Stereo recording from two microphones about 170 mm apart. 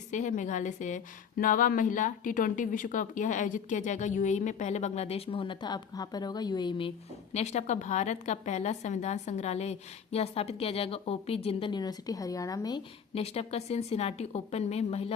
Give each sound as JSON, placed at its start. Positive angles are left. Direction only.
{"t": 0.1, "sound": "a woman's voice", "side_deg": 45}
{"t": 7.3, "sound": "a woman's voice", "side_deg": 40}
{"t": 13.1, "sound": "a woman's voice", "side_deg": 35}